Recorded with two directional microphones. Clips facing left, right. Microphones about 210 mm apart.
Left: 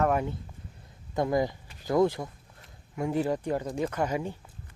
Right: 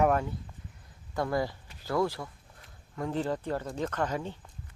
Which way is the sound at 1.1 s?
20° left (ahead or behind).